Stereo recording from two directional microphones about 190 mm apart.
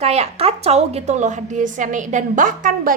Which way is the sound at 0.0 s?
35° right (ahead or behind).